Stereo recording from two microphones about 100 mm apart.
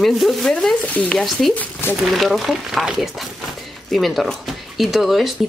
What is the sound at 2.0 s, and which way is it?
Speech, centre (ahead or behind).